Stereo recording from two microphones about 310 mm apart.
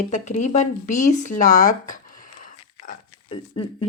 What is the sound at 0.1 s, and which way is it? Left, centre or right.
A woman's voice, left.